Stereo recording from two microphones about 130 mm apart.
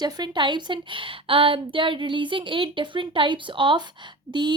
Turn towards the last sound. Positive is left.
turn(degrees=-35)  # may be behind; listen again after turning